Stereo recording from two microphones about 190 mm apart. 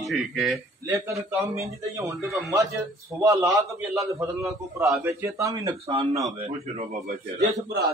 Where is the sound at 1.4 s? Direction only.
15° right (ahead or behind).